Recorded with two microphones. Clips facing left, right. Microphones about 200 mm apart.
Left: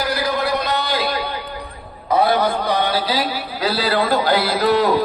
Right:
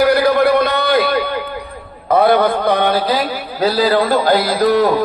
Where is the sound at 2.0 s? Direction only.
55° right (ahead or behind).